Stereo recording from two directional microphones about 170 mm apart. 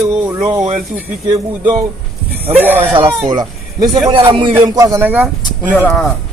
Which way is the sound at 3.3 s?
25° right (ahead or behind).